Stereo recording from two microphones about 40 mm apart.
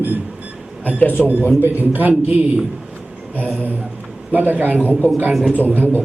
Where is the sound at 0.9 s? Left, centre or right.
Left.